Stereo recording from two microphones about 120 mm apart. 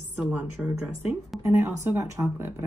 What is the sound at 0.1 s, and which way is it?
A woman's voice, 15° right (ahead or behind).